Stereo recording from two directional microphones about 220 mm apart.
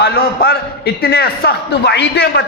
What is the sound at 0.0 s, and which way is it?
A man's voice, 45° left (ahead or behind).